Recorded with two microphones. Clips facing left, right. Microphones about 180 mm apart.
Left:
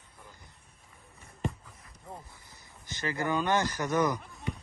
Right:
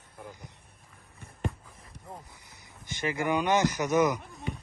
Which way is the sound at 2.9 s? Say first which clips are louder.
Right 2 dB; 20° right (ahead or behind).